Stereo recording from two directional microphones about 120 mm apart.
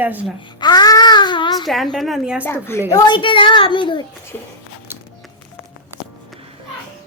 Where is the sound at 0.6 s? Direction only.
35° left (ahead or behind).